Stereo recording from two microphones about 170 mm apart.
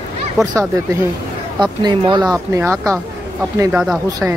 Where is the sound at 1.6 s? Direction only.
25° right (ahead or behind).